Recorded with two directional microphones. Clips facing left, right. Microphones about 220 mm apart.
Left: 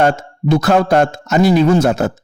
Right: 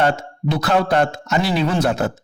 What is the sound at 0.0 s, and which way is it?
Speech, 45° left (ahead or behind).